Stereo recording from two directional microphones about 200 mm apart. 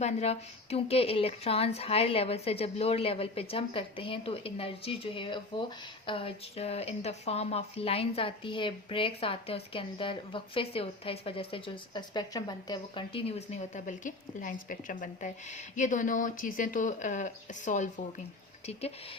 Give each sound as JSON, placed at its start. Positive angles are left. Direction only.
{"t": 0.0, "sound": "a woman's voice", "side_deg": 35}